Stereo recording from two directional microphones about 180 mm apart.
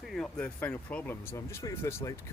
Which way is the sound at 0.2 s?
5° left (ahead or behind).